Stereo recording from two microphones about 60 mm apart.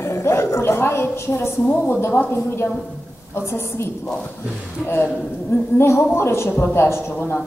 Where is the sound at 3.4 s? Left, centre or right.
Left.